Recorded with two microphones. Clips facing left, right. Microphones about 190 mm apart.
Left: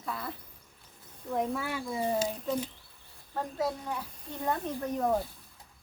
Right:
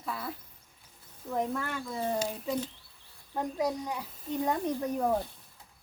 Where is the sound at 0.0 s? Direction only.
Centre (ahead or behind).